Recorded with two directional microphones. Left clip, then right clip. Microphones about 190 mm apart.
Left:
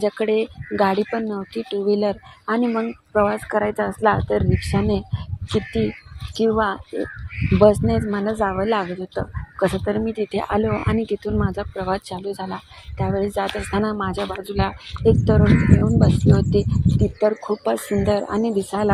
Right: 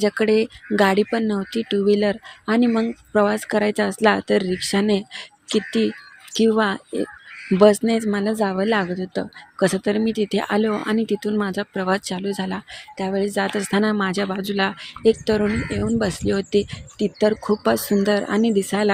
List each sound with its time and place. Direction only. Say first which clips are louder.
0.0 s speech: right 2 dB; 25° right (ahead or behind)